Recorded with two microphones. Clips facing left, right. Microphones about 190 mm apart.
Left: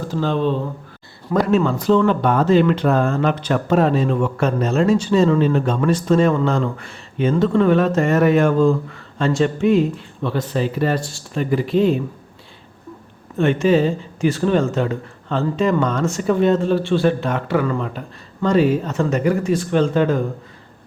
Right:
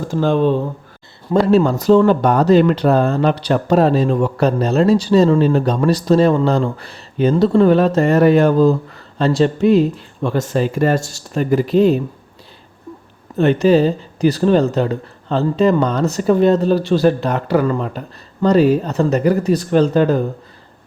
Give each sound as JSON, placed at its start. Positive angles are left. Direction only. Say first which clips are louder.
{"t": 0.1, "sound": "speech", "louder": "right 5 dB", "side_deg": -50}
{"t": 1.3, "sound": "speech", "louder": "right 4 dB", "side_deg": -30}
{"t": 13.3, "sound": "speech", "louder": "right 3 dB", "side_deg": -35}